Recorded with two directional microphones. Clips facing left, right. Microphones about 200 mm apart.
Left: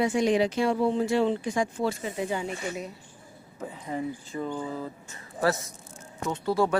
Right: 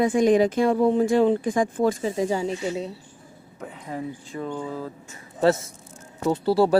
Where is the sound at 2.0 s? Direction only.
35° right (ahead or behind).